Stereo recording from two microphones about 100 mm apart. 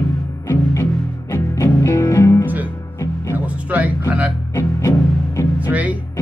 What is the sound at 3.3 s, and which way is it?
Music, 15° right (ahead or behind).